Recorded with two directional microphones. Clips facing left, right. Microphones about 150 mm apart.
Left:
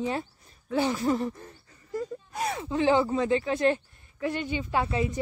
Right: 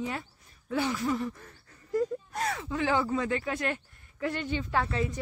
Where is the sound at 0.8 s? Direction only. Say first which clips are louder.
Left 4 dB; 30° left (ahead or behind).